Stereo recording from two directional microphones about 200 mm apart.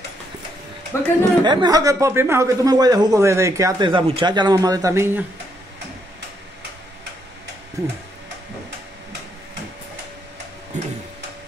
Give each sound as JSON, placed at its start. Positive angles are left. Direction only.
{"t": 0.9, "sound": "speech", "side_deg": 15}
{"t": 1.4, "sound": "speech", "side_deg": -20}
{"t": 10.7, "sound": "tick-tock", "side_deg": -35}